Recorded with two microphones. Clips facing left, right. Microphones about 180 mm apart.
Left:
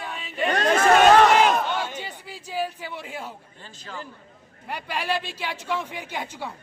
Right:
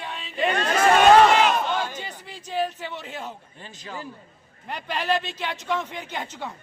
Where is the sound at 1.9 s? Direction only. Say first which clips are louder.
Left 1 dB; 10° left (ahead or behind).